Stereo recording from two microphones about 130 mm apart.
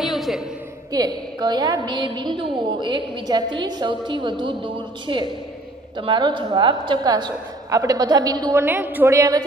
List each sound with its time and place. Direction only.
0.0 s a sound: centre (ahead or behind)
0.9 s a woman's voice: 30° right (ahead or behind)
8.5 s a woman's voice: 15° right (ahead or behind)